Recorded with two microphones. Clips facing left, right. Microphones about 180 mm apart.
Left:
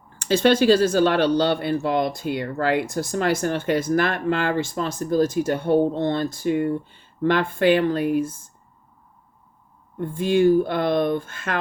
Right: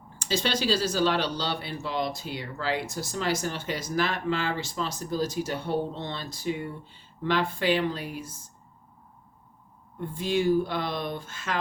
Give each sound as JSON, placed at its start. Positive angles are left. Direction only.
{"t": 0.2, "sound": "speech", "side_deg": 55}
{"t": 10.0, "sound": "speech", "side_deg": 55}